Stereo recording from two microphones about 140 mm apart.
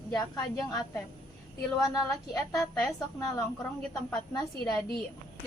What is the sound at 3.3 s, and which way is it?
Speech, 5° left (ahead or behind).